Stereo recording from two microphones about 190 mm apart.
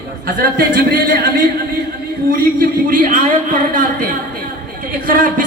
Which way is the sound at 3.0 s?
40° right (ahead or behind).